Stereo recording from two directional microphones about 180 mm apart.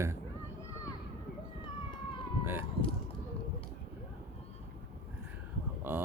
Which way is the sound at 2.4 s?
10° right (ahead or behind).